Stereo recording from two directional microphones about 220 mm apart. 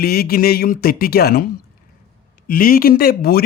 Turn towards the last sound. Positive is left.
turn(degrees=45)  # may be behind; listen again after turning